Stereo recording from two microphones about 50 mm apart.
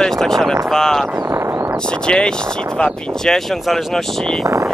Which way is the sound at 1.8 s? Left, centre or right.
Centre.